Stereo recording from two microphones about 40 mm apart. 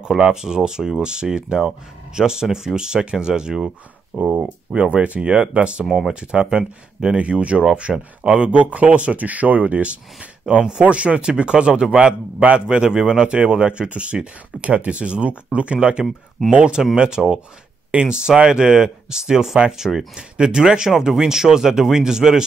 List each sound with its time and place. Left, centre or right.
0.4 s speech: centre
4.1 s a man's voice: right; by 7.2 s centre
7.2 s a man's voice: right
10.4 s a man's voice: centre
10.8 s a man's voice: right
16.4 s speech: centre
16.9 s a man's voice: centre
20.2 s a man's voice: right